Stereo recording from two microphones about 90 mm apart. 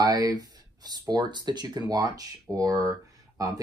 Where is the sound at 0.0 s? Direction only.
45° right (ahead or behind).